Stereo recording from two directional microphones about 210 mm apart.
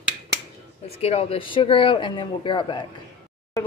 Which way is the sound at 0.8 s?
30° left (ahead or behind).